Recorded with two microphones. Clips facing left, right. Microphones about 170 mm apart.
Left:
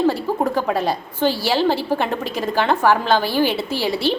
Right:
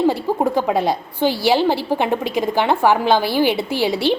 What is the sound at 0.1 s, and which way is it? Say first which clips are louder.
A woman's voice: right 2 dB; 15° right (ahead or behind).